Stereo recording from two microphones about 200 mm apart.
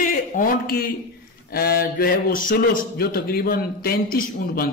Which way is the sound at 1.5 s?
50° left (ahead or behind).